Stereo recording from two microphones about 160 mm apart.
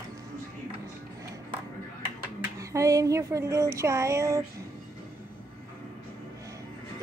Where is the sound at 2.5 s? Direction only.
20° right (ahead or behind).